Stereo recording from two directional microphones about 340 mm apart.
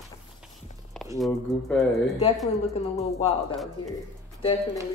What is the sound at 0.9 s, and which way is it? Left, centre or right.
Speech, centre.